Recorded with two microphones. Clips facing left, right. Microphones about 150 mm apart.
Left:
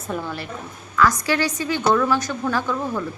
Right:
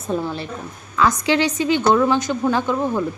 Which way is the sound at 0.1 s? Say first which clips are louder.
Right 4 dB; 25° right (ahead or behind).